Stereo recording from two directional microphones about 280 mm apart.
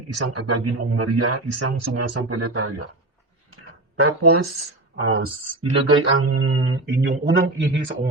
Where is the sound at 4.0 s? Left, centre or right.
Right.